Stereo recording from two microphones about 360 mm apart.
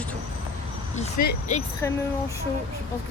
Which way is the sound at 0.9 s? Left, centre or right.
Left.